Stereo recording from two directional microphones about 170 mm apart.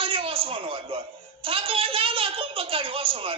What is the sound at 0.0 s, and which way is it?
A woman's voice, 30° right (ahead or behind).